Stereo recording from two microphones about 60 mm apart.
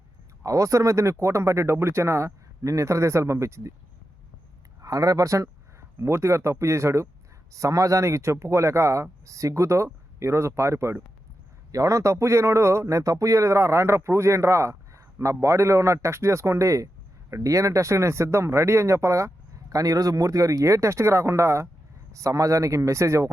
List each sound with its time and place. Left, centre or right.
0.4 s speech: right
4.8 s speech: right
6.0 s speech: right
7.5 s speech: right
11.7 s speech: right
19.7 s speech: right
22.1 s speech: right